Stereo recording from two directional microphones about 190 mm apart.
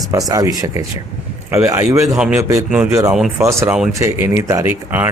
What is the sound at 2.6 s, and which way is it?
Speech, 5° right (ahead or behind).